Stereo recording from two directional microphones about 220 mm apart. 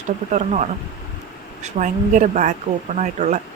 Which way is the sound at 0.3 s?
30° right (ahead or behind).